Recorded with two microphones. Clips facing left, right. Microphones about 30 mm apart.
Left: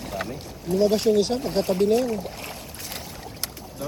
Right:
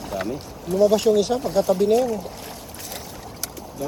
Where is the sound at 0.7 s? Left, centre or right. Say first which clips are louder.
Right 3 dB; right.